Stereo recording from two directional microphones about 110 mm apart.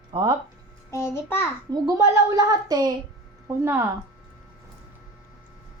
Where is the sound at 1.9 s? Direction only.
30° right (ahead or behind).